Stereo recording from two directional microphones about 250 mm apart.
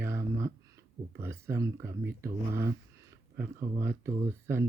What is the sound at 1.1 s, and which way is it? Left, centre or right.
Speech, centre.